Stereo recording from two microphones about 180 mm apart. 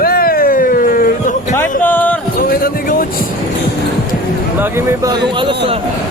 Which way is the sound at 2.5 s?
55° left (ahead or behind).